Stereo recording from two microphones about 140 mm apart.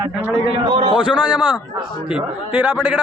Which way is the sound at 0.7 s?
40° right (ahead or behind).